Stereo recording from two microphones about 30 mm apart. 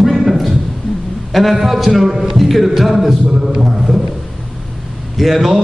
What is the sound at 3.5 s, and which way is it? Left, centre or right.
Speech, centre.